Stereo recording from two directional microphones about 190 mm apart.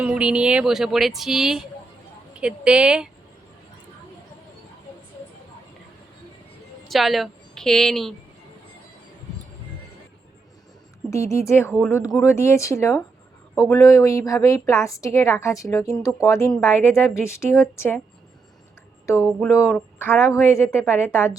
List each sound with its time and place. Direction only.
0.0 s speech: 5° right (ahead or behind)
6.8 s a woman's voice: centre (ahead or behind)
11.1 s a woman's voice: 15° left (ahead or behind)
19.0 s a woman's voice: 10° left (ahead or behind)